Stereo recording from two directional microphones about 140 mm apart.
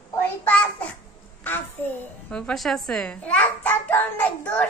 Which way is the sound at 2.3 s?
5° left (ahead or behind).